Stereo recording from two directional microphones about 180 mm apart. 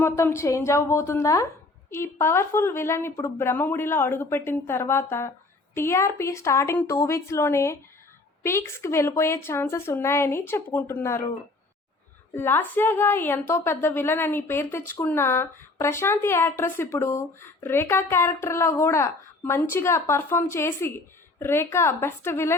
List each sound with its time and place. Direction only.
0.0 s speech: 15° left (ahead or behind)
12.3 s speech: 10° left (ahead or behind)